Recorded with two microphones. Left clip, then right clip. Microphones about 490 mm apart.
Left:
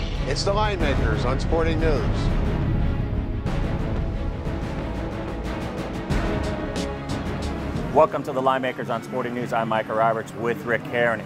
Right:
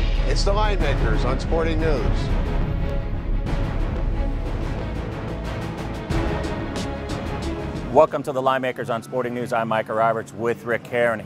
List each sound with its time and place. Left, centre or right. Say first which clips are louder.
0.3 s speech: even; centre
7.9 s speech: right 2 dB; right